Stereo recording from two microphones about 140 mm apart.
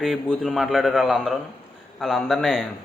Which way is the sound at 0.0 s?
Centre (ahead or behind).